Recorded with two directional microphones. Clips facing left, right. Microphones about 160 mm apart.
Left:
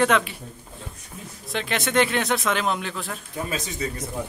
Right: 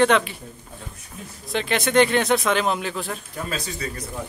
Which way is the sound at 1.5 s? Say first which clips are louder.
Right 3 dB; centre (ahead or behind).